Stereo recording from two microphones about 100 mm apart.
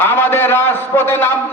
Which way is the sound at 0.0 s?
25° left (ahead or behind).